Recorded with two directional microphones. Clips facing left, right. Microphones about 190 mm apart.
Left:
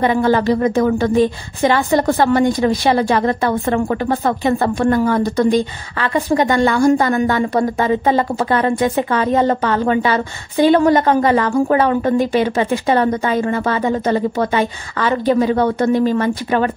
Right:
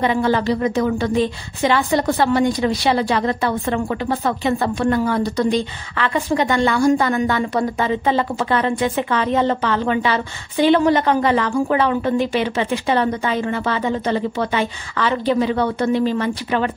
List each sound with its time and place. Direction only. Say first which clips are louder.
0.0 s a woman's voice: left 3 dB; 45° left (ahead or behind)